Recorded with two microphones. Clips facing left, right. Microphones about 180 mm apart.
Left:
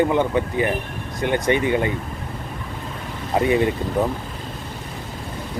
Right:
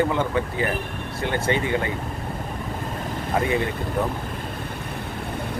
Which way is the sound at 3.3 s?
20° left (ahead or behind).